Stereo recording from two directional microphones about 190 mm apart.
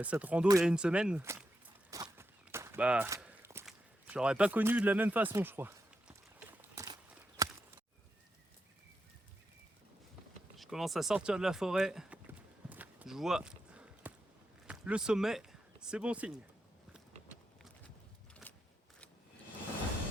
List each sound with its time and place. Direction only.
0.0 s speech: 5° right (ahead or behind)
1.9 s walk: 20° right (ahead or behind)
3.7 s speech: 5° right (ahead or behind)
6.6 s a sound: 15° right (ahead or behind)
10.6 s a sound: centre (ahead or behind)
14.7 s speech: 5° right (ahead or behind)